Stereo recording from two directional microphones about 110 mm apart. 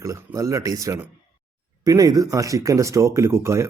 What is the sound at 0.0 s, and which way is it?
Speech, 30° right (ahead or behind).